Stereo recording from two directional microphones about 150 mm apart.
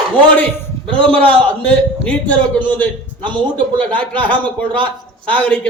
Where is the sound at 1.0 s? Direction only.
35° right (ahead or behind).